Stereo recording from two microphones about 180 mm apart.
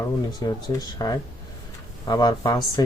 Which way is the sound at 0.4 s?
20° left (ahead or behind).